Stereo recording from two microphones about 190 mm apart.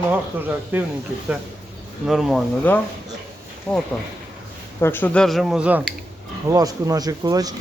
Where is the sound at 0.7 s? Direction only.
10° right (ahead or behind).